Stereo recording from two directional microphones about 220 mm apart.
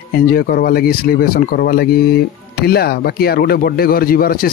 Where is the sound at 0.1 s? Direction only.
45° left (ahead or behind).